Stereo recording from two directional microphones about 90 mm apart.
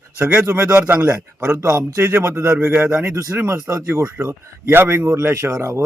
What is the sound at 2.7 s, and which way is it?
Speech, 10° right (ahead or behind).